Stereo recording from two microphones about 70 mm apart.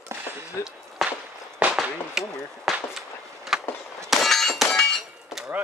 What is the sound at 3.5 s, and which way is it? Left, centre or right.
Skateboard, centre.